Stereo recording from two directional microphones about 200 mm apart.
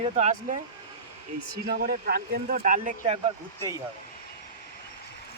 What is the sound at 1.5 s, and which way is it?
Speech, 50° right (ahead or behind).